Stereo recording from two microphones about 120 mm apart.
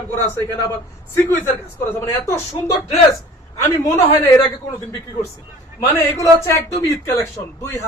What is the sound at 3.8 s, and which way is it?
Speech, 25° left (ahead or behind).